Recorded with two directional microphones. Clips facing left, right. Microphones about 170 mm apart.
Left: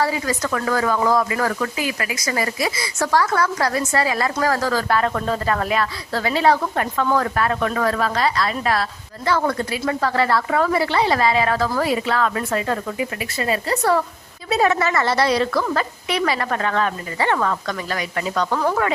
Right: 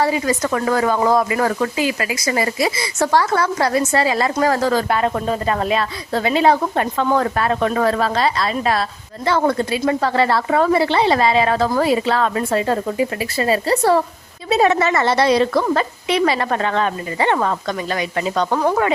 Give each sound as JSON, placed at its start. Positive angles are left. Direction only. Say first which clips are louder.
{"t": 0.0, "sound": "speech", "louder": "right 4 dB", "side_deg": -20}